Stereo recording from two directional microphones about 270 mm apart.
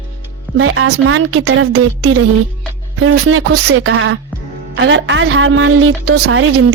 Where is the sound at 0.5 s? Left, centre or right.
Right.